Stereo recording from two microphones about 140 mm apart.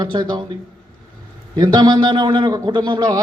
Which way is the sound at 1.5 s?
30° right (ahead or behind).